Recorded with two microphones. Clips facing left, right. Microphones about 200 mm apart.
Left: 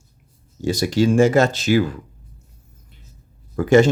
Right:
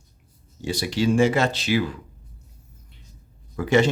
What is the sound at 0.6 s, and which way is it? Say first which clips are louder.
Speech: left 5 dB; 45° left (ahead or behind).